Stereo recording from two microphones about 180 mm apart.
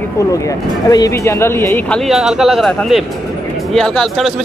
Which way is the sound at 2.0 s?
Centre (ahead or behind).